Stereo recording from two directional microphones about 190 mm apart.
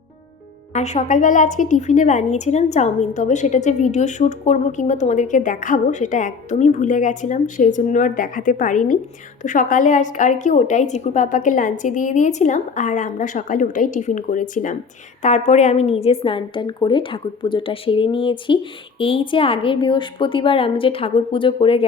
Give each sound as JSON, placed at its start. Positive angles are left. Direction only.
{"t": 0.7, "sound": "a woman's voice", "side_deg": 40}